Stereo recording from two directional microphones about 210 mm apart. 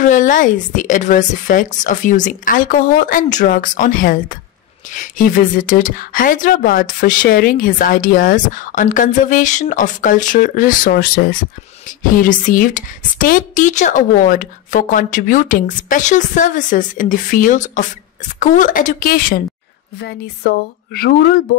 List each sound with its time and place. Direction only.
0.0 s a woman's voice: 40° left (ahead or behind)